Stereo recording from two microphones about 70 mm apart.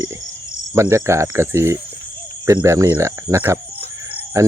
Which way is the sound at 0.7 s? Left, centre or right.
Right.